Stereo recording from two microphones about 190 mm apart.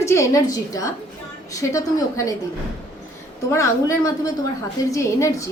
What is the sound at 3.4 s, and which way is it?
A woman's voice, 15° left (ahead or behind).